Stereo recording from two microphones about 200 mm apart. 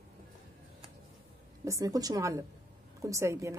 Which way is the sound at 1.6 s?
15° right (ahead or behind).